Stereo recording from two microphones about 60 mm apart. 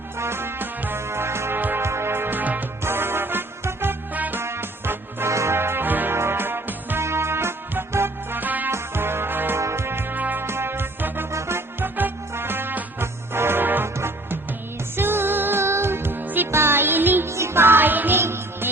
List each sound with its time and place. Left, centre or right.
0.2 s music: right
2.8 s music: right
4.4 s music: right
8.7 s music: right
9.6 s music: right
10.4 s music: right
11.3 s music: right
16.5 s music: right
17.2 s music: right
18.2 s music: right